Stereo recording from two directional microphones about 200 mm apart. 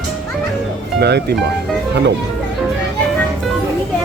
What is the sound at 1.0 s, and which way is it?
Speech, 55° right (ahead or behind).